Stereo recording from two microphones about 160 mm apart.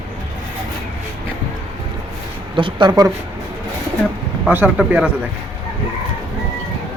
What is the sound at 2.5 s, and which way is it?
Speech, 30° right (ahead or behind).